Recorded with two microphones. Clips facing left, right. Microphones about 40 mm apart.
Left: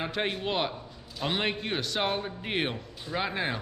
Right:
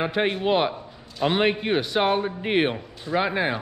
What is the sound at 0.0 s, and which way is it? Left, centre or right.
A man's voice, centre.